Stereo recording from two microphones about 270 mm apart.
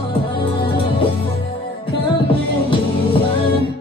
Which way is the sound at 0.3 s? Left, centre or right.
Centre.